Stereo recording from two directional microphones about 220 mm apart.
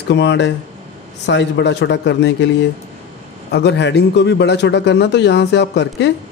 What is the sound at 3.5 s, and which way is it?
A man's voice, 50° left (ahead or behind).